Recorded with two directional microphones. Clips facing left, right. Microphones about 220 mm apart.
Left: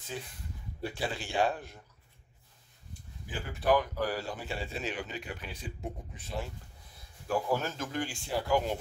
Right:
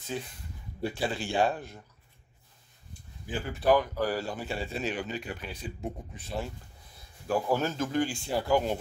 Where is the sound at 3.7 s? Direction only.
35° right (ahead or behind).